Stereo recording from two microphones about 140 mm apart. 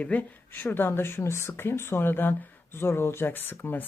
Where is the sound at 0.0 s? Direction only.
10° left (ahead or behind).